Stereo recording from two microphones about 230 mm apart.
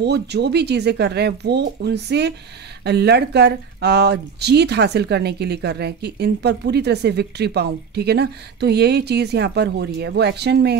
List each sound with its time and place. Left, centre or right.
0.0 s speech: right